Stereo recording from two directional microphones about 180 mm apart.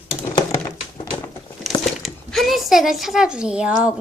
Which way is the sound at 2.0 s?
Centre (ahead or behind).